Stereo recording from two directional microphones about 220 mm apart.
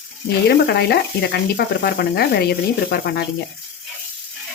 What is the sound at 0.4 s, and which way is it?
Sizzle, 50° left (ahead or behind).